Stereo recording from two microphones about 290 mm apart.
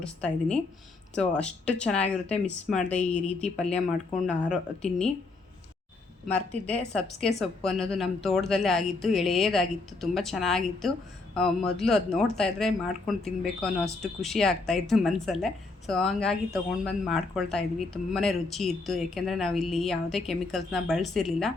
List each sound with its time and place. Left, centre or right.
0.0 s speech: centre
6.2 s speech: centre